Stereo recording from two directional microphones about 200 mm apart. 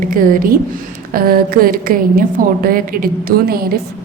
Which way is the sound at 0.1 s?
45° right (ahead or behind).